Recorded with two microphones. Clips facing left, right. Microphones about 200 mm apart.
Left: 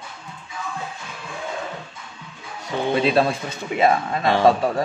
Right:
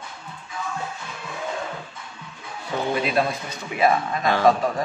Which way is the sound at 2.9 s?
30° left (ahead or behind).